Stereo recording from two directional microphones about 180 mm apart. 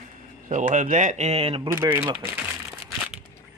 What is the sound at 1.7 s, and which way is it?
Speech, 15° right (ahead or behind).